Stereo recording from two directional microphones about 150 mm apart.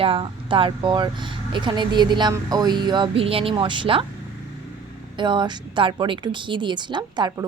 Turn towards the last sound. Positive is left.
turn(degrees=-30)  # may be behind; listen again after turning